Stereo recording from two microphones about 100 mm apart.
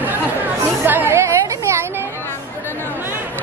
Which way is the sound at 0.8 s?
20° right (ahead or behind).